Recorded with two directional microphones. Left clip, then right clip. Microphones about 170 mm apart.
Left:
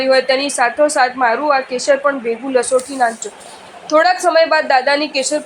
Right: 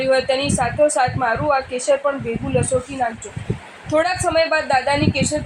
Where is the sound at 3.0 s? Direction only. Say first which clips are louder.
Left 6 dB; 35° left (ahead or behind).